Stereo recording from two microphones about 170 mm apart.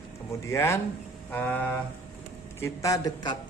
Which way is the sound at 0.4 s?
15° left (ahead or behind).